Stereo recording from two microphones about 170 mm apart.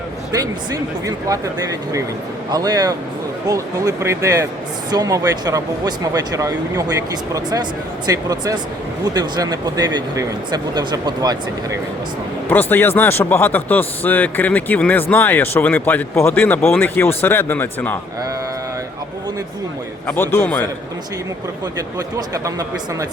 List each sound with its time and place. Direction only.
0.3 s speech: 20° right (ahead or behind)
12.5 s speech: 10° left (ahead or behind)
20.1 s speech: 15° left (ahead or behind)
22.4 s speech: 20° right (ahead or behind)